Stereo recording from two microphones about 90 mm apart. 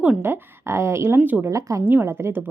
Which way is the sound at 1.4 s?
35° right (ahead or behind).